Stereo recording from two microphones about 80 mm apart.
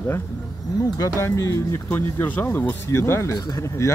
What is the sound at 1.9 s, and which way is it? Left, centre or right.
Speech, left.